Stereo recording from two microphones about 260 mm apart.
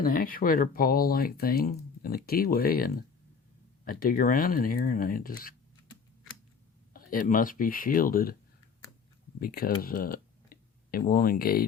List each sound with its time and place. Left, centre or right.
0.0 s speech: left
6.9 s speech: left
9.4 s speech: left
9.8 s tick: left